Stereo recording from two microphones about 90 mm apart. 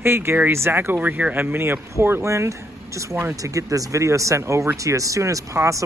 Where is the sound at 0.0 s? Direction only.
25° right (ahead or behind).